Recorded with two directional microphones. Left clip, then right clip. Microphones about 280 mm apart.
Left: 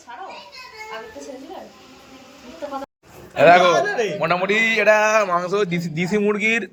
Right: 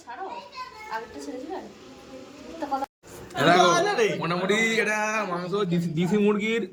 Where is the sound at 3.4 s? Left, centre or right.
Centre.